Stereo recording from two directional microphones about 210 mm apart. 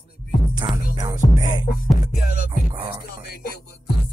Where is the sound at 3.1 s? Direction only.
45° left (ahead or behind).